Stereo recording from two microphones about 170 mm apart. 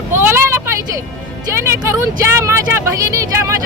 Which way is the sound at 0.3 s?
15° right (ahead or behind).